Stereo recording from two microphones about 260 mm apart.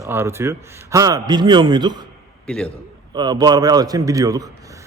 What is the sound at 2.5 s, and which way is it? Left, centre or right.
Speech, centre.